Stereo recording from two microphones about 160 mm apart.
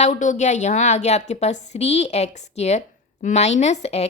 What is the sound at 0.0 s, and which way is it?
A woman's voice, 50° left (ahead or behind).